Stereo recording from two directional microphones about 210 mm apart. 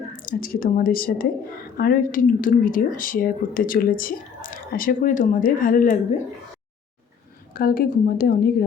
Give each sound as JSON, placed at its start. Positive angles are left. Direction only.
{"t": 0.2, "sound": "a woman's voice", "side_deg": 40}
{"t": 7.5, "sound": "a woman's voice", "side_deg": 45}